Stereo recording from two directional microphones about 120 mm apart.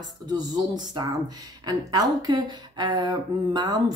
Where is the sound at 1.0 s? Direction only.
35° right (ahead or behind).